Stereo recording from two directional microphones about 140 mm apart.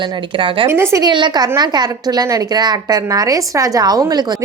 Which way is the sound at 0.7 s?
20° right (ahead or behind).